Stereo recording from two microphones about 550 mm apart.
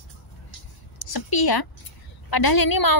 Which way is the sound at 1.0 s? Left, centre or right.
Left.